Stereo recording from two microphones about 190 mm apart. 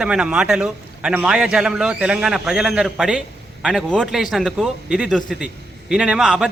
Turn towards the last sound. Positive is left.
turn(degrees=-5)  # may be behind; listen again after turning